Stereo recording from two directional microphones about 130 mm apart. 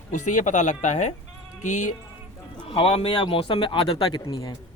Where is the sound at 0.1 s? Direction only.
75° left (ahead or behind).